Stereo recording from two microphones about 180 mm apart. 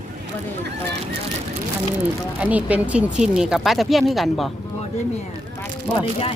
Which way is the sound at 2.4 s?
5° right (ahead or behind).